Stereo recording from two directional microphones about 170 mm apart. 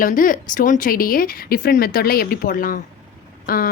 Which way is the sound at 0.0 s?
55° left (ahead or behind).